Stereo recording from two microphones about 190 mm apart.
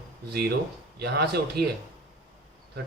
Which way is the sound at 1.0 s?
55° right (ahead or behind).